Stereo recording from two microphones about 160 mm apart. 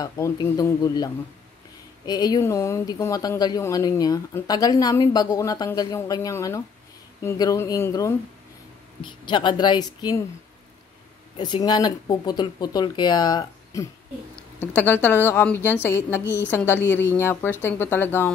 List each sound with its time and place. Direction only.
0.0 s speech: 20° left (ahead or behind)
9.0 s speech: 30° left (ahead or behind)
11.3 s speech: 30° left (ahead or behind)
14.8 s a woman's voice: 10° left (ahead or behind)